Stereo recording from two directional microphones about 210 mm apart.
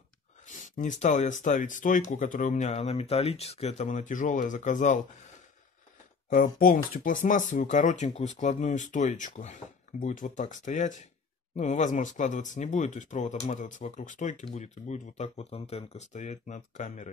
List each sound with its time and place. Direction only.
0.7 s speech: 35° left (ahead or behind)
6.3 s speech: 40° left (ahead or behind)